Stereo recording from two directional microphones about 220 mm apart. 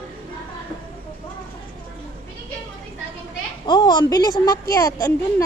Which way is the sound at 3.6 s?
20° left (ahead or behind).